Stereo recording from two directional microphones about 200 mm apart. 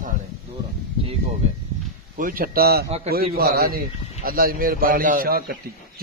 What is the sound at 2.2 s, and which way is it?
Speech, 45° right (ahead or behind).